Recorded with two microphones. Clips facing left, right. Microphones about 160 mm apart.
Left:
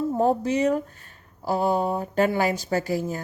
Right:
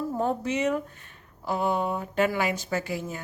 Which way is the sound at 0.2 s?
35° left (ahead or behind).